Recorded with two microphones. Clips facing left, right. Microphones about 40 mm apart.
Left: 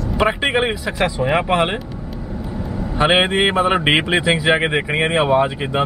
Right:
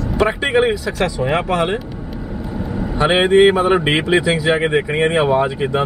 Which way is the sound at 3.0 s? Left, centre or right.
Centre.